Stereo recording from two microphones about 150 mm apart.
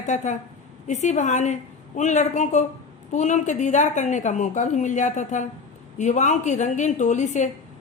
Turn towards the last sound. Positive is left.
turn(degrees=50)  # may be behind; listen again after turning